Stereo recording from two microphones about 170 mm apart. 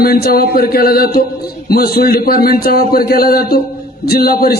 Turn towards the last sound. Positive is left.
turn(degrees=65)  # may be behind; listen again after turning